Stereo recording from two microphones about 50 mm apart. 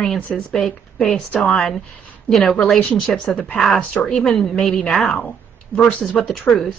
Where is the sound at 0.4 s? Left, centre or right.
Centre.